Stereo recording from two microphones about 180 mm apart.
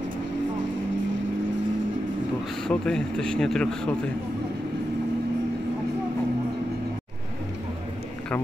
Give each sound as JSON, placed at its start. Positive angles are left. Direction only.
{"t": 2.7, "sound": "a man's voice", "side_deg": 5}